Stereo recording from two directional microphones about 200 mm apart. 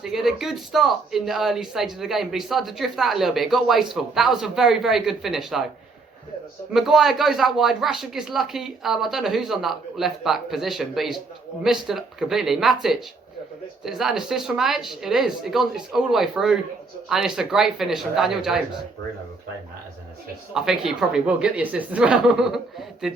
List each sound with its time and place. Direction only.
0.0 s speech: centre (ahead or behind)
6.7 s speech: centre (ahead or behind)
20.5 s speech: centre (ahead or behind)